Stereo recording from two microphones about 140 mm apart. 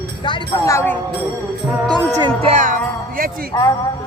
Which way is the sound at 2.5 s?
70° right (ahead or behind).